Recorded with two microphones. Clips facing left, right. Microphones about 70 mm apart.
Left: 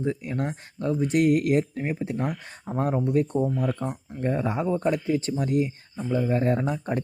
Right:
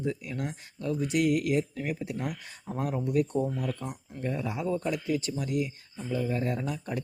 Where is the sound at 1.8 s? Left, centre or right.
Left.